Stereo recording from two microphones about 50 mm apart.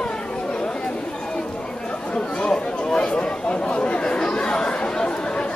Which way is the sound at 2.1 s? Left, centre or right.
Centre.